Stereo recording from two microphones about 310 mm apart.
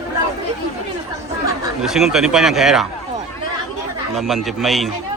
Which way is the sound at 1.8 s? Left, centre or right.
Centre.